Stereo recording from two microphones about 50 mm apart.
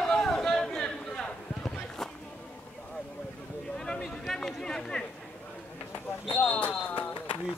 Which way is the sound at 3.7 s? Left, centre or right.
Centre.